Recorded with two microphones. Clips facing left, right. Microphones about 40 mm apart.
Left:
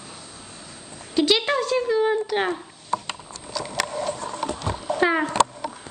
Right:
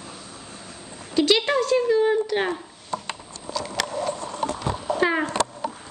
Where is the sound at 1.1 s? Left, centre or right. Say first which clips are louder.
Right 1 dB; centre.